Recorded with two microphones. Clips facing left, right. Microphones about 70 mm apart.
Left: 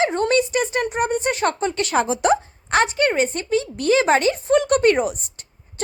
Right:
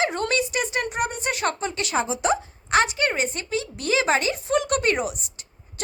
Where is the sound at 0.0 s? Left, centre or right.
Left.